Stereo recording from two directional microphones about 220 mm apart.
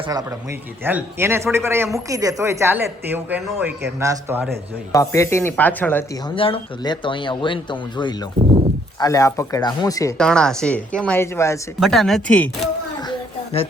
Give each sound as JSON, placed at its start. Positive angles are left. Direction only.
{"t": 0.1, "sound": "speech", "side_deg": -15}
{"t": 4.9, "sound": "speech", "side_deg": 15}
{"t": 6.3, "sound": "speech", "side_deg": 25}
{"t": 10.2, "sound": "a woman's voice", "side_deg": 5}
{"t": 11.8, "sound": "a woman's voice", "side_deg": 0}
{"t": 13.1, "sound": "a sound", "side_deg": 25}